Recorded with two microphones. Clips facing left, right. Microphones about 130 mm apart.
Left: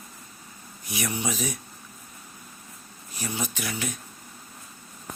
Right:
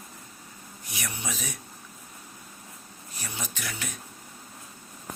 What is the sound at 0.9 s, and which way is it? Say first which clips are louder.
Speech: left 7 dB; 10° left (ahead or behind).